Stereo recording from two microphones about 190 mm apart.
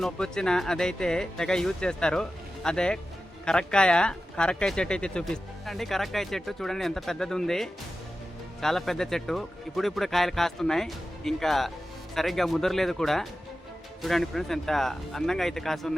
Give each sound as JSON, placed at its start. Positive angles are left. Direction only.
{"t": 0.0, "sound": "speech", "side_deg": 5}